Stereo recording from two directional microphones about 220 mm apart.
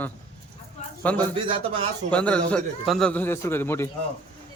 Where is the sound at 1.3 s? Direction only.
25° right (ahead or behind).